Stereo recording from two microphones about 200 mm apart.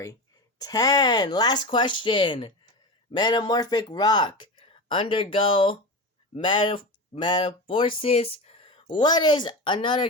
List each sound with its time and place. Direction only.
0.6 s speech: 20° left (ahead or behind)